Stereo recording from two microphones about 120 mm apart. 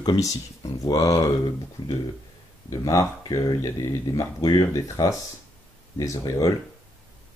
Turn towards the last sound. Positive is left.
turn(degrees=25)  # may be behind; listen again after turning